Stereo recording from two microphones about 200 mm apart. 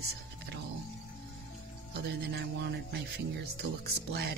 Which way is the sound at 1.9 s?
55° right (ahead or behind).